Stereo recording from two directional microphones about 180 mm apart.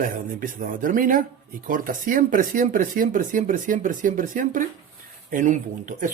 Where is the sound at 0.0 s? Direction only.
50° right (ahead or behind).